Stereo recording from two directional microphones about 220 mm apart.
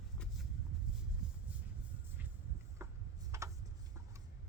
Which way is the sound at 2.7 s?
15° right (ahead or behind).